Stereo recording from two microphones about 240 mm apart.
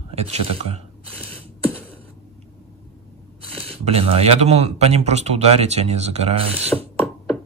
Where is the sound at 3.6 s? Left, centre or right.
Right.